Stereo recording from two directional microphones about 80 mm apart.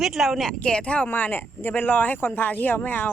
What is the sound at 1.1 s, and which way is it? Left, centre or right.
Speech, left.